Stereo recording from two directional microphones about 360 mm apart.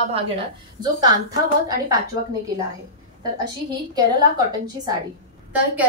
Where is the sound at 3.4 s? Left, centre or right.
Centre.